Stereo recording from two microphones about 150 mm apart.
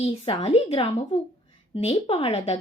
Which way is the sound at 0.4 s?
40° left (ahead or behind).